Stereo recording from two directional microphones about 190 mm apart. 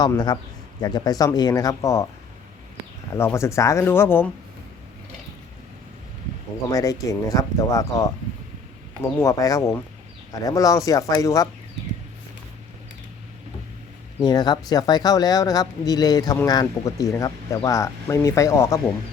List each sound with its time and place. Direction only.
0.0 s speech: 20° left (ahead or behind)
3.1 s speech: 15° left (ahead or behind)
6.7 s speech: 20° left (ahead or behind)
14.2 s speech: 20° left (ahead or behind)